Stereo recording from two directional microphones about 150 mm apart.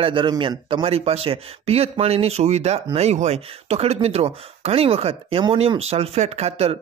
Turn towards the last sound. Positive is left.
turn(degrees=-45)  # may be behind; listen again after turning